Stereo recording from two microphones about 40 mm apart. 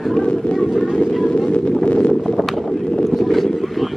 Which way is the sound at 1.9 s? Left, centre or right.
Left.